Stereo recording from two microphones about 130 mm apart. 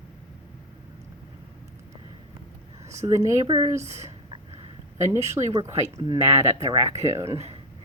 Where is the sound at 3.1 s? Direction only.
25° right (ahead or behind).